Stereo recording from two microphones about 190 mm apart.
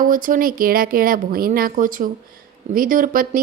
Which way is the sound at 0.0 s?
45° right (ahead or behind).